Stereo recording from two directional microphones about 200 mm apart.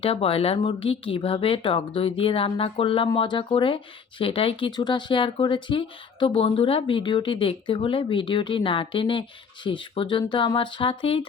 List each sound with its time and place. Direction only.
0.0 s speech: 30° left (ahead or behind)